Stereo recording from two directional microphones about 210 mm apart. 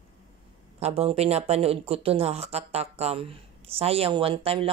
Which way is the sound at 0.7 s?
30° right (ahead or behind).